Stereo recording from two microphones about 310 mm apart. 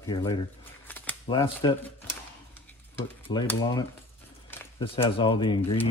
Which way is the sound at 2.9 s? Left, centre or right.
Centre.